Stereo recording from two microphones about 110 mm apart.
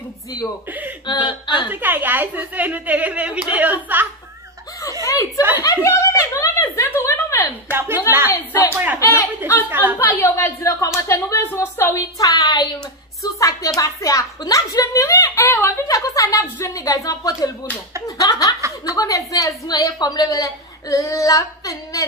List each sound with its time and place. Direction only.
1.0 s speech: 45° left (ahead or behind)
1.7 s a woman's voice: 15° right (ahead or behind)
5.0 s chuckle: 30° left (ahead or behind)
5.6 s speech: 30° left (ahead or behind)
8.7 s a woman's voice: 15° right (ahead or behind)
9.9 s a child's voice: 20° left (ahead or behind)
15.9 s a woman's voice: 30° left (ahead or behind)